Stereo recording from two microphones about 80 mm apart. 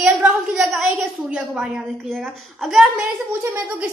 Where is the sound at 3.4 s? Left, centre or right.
Right.